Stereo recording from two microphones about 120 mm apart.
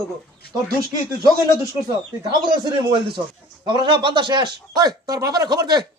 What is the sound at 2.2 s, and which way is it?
Speech, 35° right (ahead or behind).